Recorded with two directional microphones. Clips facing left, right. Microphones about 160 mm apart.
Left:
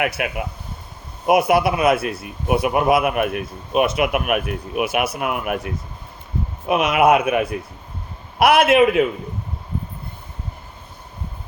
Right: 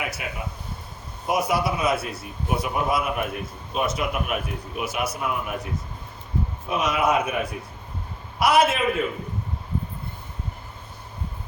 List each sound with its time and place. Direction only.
0.0 s a man's voice: 65° left (ahead or behind)
6.7 s a man's voice: 65° left (ahead or behind)
8.4 s a man's voice: 60° left (ahead or behind)